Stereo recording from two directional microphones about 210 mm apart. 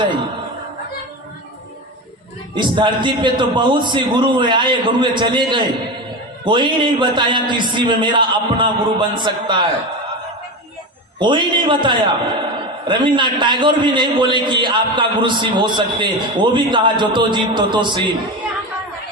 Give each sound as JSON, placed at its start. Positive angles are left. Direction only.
{"t": 2.6, "sound": "a man's voice", "side_deg": -20}
{"t": 11.2, "sound": "a man's voice", "side_deg": -20}